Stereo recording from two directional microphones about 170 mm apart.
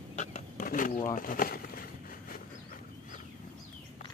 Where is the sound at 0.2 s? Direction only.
50° left (ahead or behind).